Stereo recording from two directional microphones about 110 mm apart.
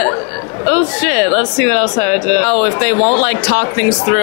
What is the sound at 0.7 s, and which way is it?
Speech, 20° left (ahead or behind).